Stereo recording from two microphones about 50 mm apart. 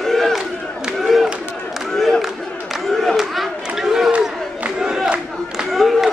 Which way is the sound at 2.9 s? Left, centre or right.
Centre.